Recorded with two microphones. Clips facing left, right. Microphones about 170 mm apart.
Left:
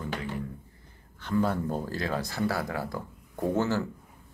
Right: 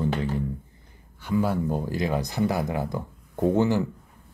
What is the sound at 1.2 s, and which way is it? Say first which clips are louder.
Speech: right 3 dB; 10° right (ahead or behind).